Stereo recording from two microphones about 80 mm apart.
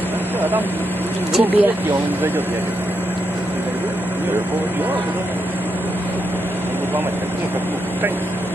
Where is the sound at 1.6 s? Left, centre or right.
Right.